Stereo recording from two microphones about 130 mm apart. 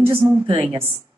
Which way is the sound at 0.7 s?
15° right (ahead or behind).